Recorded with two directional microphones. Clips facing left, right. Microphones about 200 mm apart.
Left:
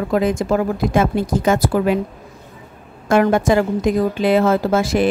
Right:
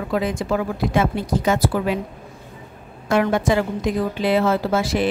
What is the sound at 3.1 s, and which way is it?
A woman's voice, 45° left (ahead or behind).